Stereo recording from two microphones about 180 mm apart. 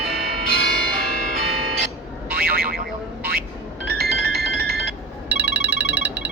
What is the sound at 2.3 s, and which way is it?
Boing, 55° right (ahead or behind).